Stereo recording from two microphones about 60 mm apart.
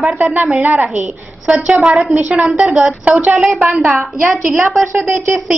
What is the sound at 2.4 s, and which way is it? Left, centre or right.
A woman's voice, right.